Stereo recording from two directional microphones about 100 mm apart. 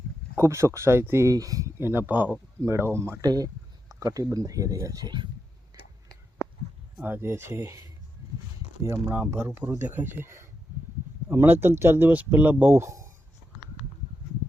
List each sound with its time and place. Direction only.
0.3 s speech: 30° right (ahead or behind)
1.8 s speech: 20° right (ahead or behind)
3.2 s speech: 40° right (ahead or behind)
6.4 s a sound: 25° left (ahead or behind)
7.0 s speech: 20° right (ahead or behind)